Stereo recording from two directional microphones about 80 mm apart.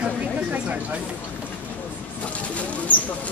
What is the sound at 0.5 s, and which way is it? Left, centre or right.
Speech, centre.